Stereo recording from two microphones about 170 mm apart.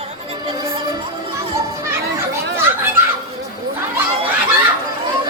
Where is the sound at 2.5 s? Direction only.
15° right (ahead or behind).